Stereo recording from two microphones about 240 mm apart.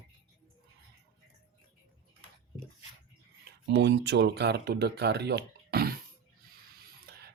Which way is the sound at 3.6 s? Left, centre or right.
Right.